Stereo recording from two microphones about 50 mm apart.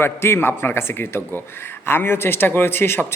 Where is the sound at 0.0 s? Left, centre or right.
Left.